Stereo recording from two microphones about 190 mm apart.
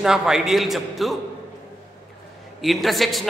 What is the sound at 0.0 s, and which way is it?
A man's voice, 5° right (ahead or behind).